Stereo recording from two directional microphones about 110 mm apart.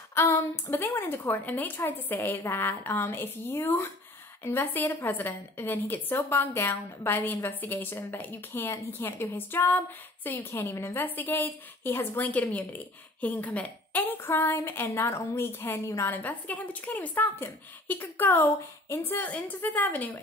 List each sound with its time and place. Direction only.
0.1 s a woman's voice: 20° left (ahead or behind)